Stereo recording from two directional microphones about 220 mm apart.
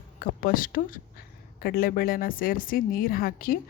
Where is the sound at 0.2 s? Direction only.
40° left (ahead or behind).